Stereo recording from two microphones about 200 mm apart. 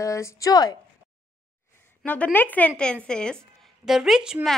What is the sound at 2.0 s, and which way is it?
A woman's voice, 5° left (ahead or behind).